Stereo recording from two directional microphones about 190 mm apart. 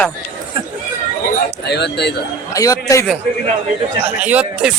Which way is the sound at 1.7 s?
60° left (ahead or behind).